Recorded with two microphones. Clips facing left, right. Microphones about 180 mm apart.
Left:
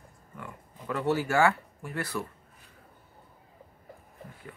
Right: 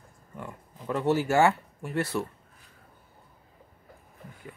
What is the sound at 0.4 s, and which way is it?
Speech, 20° right (ahead or behind).